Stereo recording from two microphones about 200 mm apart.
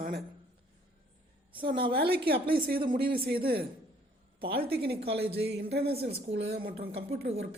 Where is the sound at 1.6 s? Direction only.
25° right (ahead or behind).